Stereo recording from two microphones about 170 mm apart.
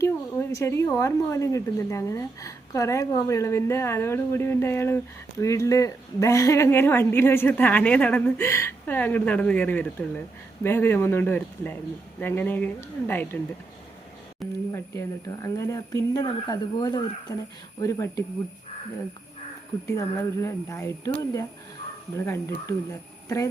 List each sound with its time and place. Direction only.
0.0 s speech: 15° left (ahead or behind)
14.7 s speech: 15° left (ahead or behind)
19.9 s speech: 15° left (ahead or behind)
22.2 s speech: 15° left (ahead or behind)